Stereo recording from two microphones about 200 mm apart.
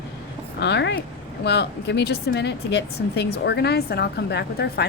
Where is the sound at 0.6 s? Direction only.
60° left (ahead or behind).